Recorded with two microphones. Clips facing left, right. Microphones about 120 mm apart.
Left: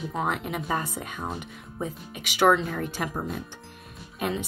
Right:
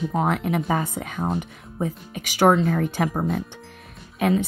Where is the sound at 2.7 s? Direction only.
60° right (ahead or behind).